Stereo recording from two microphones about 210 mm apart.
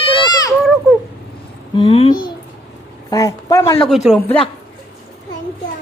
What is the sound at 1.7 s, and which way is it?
A child's voice, 25° left (ahead or behind).